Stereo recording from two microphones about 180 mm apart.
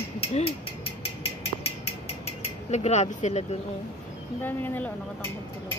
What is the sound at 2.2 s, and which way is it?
Mechanisms, 35° left (ahead or behind).